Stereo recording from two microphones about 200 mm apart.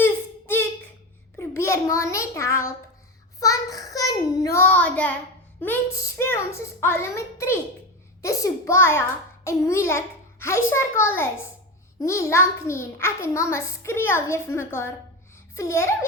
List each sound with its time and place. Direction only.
0.0 s a sound: 10° left (ahead or behind)
3.4 s child singing: 15° left (ahead or behind)
5.5 s a child's voice: 10° left (ahead or behind)